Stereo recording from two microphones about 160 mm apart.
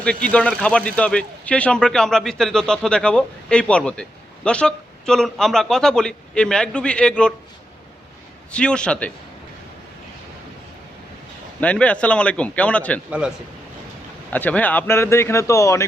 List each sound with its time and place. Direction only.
0.0 s speech: 5° left (ahead or behind)
8.5 s speech: 5° left (ahead or behind)
11.6 s speech: 10° left (ahead or behind)
13.1 s speech: 5° right (ahead or behind)
14.3 s speech: 10° left (ahead or behind)